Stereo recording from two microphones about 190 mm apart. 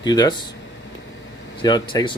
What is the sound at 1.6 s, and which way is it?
Speech, 20° left (ahead or behind).